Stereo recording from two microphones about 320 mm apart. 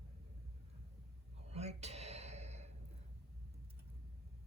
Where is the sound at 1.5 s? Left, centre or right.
Centre.